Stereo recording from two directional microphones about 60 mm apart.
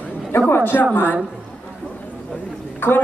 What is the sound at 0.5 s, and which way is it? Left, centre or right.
Speech, left.